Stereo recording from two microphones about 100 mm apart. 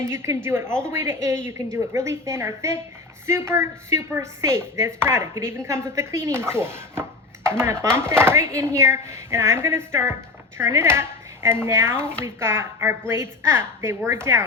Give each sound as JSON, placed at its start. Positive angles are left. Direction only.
{"t": 0.1, "sound": "speech", "side_deg": -25}